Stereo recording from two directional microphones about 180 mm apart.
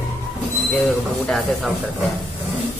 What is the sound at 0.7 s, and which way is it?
A woman's voice, centre (ahead or behind).